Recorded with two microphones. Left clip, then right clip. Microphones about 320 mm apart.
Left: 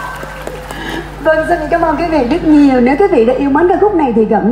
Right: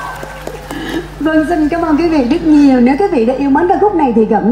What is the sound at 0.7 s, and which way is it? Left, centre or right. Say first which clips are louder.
A woman's voice: right 3 dB; centre.